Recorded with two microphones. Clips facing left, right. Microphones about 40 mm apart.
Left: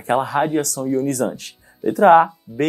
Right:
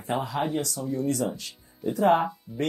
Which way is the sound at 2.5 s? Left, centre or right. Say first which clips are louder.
Left 8 dB; centre.